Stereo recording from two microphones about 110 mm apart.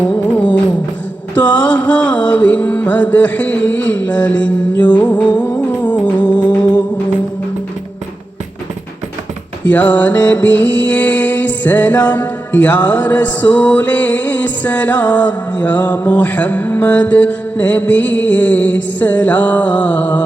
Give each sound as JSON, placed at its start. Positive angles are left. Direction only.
{"t": 0.0, "sound": "music", "side_deg": 15}
{"t": 9.6, "sound": "music", "side_deg": 15}